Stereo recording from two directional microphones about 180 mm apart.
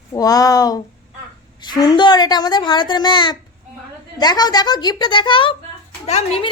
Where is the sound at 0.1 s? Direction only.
20° left (ahead or behind).